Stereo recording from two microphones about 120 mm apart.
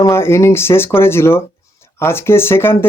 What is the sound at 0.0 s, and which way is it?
Speech, 20° left (ahead or behind).